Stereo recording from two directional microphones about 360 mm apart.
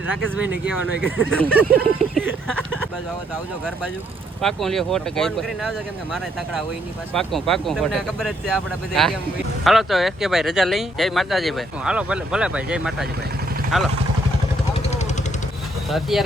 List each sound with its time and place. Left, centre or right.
0.2 s speech: centre
4.4 s speech: centre
7.1 s speech: centre
14.7 s vehicle: centre
15.9 s speech: centre